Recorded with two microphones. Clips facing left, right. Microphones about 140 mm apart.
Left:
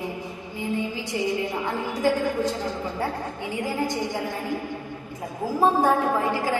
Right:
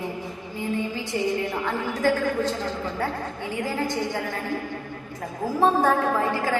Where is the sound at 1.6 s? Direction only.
15° left (ahead or behind).